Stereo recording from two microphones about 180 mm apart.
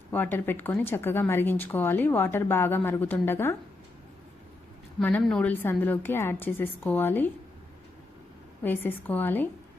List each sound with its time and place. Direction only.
0.1 s a woman's voice: 10° left (ahead or behind)
4.9 s a woman's voice: 5° left (ahead or behind)
8.6 s a woman's voice: 10° left (ahead or behind)